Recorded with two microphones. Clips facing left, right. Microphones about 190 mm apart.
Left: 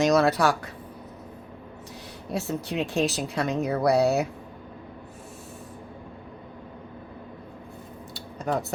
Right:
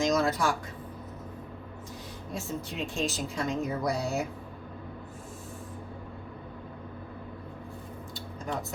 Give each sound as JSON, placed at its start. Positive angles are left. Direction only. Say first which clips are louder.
{"t": 0.0, "sound": "a woman's voice", "louder": "left 6 dB", "side_deg": 70}
{"t": 2.3, "sound": "a woman's voice", "louder": "left 7 dB", "side_deg": 70}
{"t": 8.1, "sound": "a sound", "louder": "left 7 dB", "side_deg": 70}